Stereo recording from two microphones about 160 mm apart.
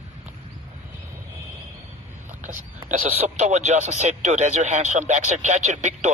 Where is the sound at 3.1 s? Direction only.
40° right (ahead or behind).